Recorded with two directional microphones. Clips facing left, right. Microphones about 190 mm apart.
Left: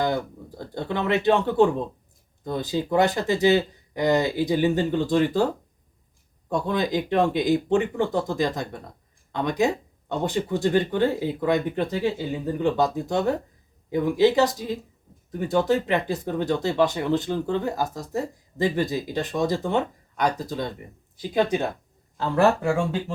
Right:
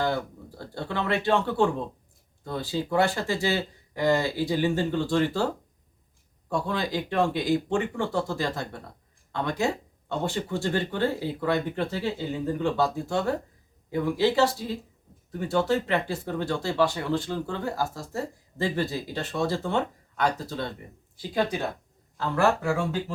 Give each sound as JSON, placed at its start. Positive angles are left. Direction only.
{"t": 0.0, "sound": "speech", "side_deg": 15}
{"t": 6.5, "sound": "speech", "side_deg": 20}